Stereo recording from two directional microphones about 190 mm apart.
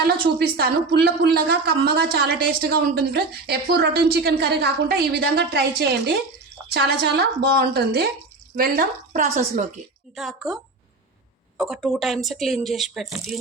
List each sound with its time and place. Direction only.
0.5 s a woman's voice: 55° right (ahead or behind)
10.2 s a woman's voice: centre (ahead or behind)